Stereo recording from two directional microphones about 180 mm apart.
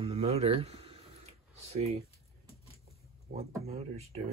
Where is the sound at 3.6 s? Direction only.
35° right (ahead or behind).